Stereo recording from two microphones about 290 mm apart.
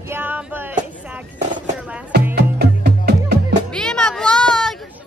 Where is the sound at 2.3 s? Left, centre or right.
Right.